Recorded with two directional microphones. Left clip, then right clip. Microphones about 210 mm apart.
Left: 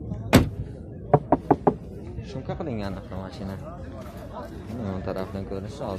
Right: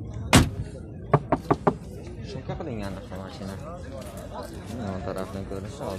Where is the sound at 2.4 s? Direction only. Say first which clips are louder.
Left 3 dB; 25° left (ahead or behind).